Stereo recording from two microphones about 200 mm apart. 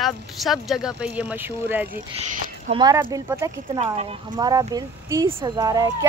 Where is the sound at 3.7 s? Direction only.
30° right (ahead or behind).